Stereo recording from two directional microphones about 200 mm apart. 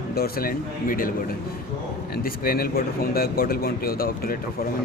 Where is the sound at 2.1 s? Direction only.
45° left (ahead or behind).